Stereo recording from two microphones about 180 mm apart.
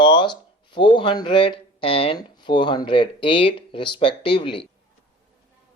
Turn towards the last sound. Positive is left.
turn(degrees=25)  # may be behind; listen again after turning